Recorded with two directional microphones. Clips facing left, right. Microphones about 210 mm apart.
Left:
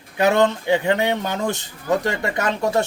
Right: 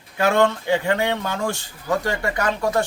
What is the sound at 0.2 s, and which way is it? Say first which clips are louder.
A man's voice: left 1 dB; 20° left (ahead or behind).